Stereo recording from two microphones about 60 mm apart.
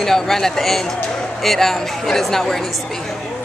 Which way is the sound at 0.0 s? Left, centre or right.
Centre.